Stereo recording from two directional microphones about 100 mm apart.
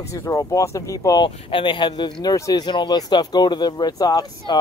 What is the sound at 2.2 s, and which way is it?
Speech, 35° left (ahead or behind).